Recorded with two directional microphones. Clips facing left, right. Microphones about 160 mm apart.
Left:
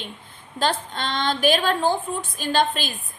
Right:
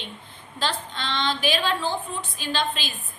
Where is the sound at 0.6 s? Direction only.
50° left (ahead or behind).